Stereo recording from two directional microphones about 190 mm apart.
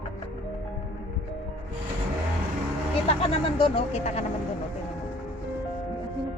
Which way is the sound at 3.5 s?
30° left (ahead or behind).